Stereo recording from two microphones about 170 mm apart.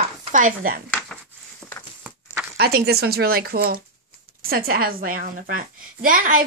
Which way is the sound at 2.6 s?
65° right (ahead or behind).